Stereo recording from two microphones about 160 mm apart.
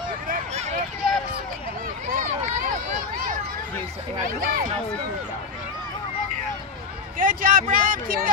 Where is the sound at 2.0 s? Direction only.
50° right (ahead or behind).